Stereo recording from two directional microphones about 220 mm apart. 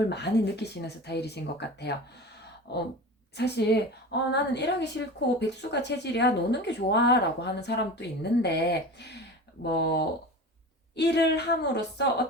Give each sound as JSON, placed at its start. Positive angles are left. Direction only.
{"t": 0.1, "sound": "a woman's voice", "side_deg": 50}